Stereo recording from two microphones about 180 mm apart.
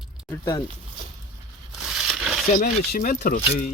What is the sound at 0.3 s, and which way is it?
Speech, 15° left (ahead or behind).